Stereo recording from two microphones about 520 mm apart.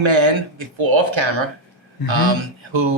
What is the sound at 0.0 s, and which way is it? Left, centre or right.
Speech, right.